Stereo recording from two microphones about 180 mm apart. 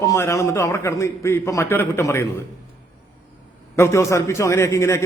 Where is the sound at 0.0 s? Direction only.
20° left (ahead or behind).